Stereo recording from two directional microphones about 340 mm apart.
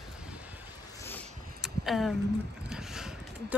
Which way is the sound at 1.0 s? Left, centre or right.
Centre.